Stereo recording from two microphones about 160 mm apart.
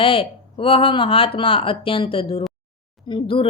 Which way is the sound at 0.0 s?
35° left (ahead or behind).